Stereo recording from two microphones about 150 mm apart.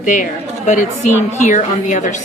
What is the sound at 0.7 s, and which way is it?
A woman's voice, 55° left (ahead or behind).